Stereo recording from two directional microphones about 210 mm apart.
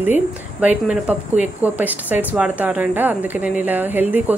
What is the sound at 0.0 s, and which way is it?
Speech, 10° right (ahead or behind).